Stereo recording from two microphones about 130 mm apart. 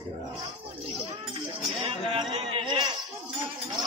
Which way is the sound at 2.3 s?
45° right (ahead or behind).